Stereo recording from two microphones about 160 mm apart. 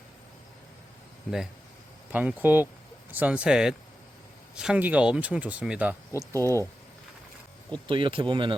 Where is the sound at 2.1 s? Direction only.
10° right (ahead or behind).